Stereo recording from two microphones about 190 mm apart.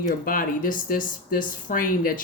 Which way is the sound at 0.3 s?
45° left (ahead or behind).